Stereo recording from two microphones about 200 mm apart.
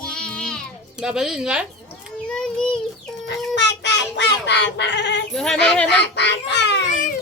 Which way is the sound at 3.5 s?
60° left (ahead or behind).